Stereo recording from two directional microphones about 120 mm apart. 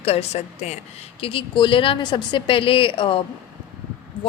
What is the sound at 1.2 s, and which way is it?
Speech, 50° left (ahead or behind).